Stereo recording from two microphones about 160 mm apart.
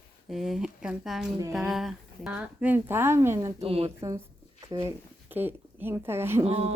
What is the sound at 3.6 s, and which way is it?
Speech, 40° right (ahead or behind).